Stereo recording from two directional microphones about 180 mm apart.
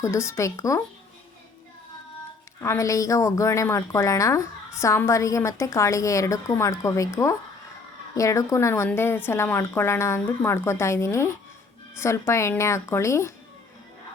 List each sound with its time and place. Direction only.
0.0 s a woman's voice: 15° left (ahead or behind)
2.6 s a woman's voice: 15° left (ahead or behind)